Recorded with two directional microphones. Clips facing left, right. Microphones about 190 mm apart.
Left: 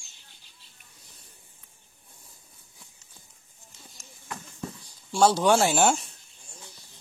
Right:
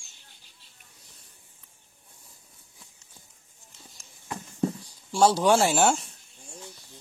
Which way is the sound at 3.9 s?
30° right (ahead or behind).